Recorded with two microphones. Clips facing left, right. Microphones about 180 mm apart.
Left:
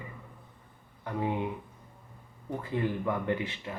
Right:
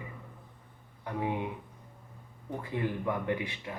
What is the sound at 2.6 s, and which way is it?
Speech, 15° right (ahead or behind).